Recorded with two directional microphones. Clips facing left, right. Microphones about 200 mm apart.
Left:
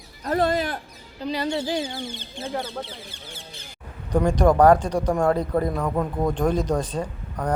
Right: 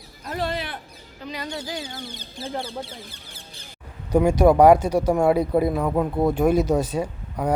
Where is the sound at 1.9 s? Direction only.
40° right (ahead or behind).